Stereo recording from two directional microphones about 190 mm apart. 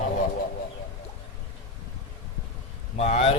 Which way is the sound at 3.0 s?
35° left (ahead or behind).